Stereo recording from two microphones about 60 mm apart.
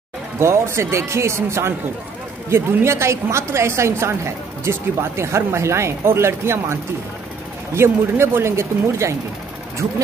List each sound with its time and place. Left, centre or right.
0.4 s a woman's voice: right